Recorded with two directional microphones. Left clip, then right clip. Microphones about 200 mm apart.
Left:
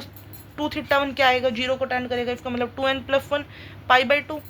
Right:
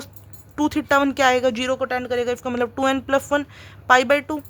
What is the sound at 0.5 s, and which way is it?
Speech, 50° right (ahead or behind).